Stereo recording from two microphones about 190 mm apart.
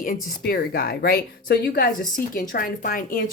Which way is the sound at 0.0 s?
50° left (ahead or behind).